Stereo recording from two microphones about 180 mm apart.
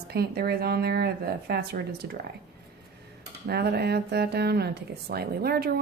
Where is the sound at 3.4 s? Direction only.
65° right (ahead or behind).